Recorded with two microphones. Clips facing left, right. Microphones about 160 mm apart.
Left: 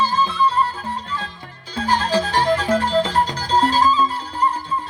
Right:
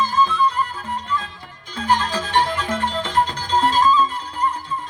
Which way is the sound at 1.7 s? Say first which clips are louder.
Left 2 dB; 35° left (ahead or behind).